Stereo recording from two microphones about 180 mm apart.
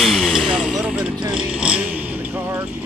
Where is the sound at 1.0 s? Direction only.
25° right (ahead or behind).